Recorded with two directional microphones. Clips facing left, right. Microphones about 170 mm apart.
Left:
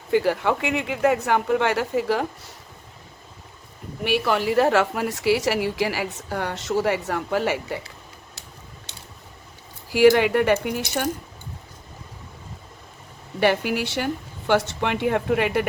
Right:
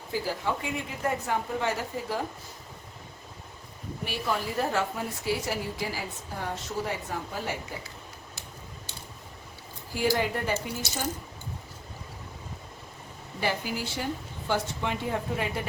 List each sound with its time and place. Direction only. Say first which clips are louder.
0.1 s speech: left 10 dB; 70° left (ahead or behind)
4.0 s a woman's voice: left 9 dB; 75° left (ahead or behind)
9.9 s speech: left 11 dB; 80° left
13.4 s speech: left 9 dB; 70° left (ahead or behind)